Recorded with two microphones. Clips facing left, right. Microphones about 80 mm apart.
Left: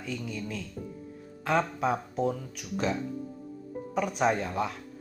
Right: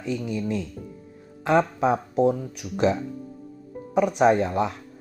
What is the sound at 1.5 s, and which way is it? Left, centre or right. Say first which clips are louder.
Speech: right 6 dB; right.